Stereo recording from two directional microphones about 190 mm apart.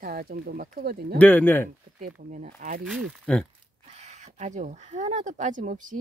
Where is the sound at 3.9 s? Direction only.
40° right (ahead or behind).